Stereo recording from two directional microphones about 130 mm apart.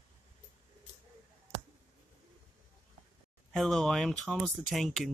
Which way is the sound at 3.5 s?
Centre (ahead or behind).